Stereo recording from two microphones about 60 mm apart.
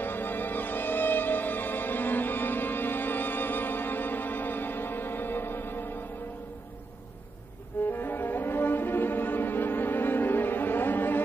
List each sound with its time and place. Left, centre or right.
0.0 s music: left
7.8 s music: left